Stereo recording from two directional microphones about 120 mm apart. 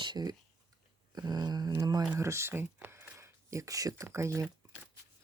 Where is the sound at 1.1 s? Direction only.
35° right (ahead or behind).